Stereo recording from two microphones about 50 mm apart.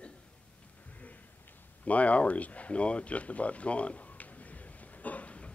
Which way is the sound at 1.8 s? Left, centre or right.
Left.